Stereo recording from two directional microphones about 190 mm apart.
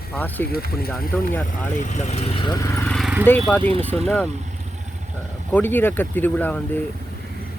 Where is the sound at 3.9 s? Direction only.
5° left (ahead or behind).